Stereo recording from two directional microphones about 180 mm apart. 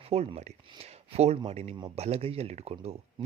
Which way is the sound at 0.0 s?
35° right (ahead or behind).